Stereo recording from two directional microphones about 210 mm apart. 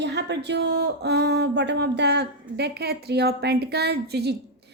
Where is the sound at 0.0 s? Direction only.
55° right (ahead or behind).